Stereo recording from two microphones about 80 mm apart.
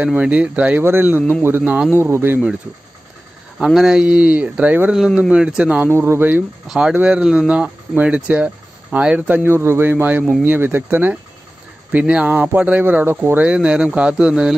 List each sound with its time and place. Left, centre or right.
0.0 s speech: centre
0.8 s speech: right
1.6 s speech: centre
2.0 s speech: right
3.5 s speech: centre
4.0 s speech: centre
4.9 s speech: centre
5.9 s speech: right
6.7 s speech: centre
9.4 s speech: right
13.5 s speech: centre